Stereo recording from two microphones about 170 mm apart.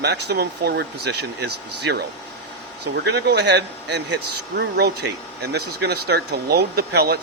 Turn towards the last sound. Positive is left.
turn(degrees=-70)  # may be behind; listen again after turning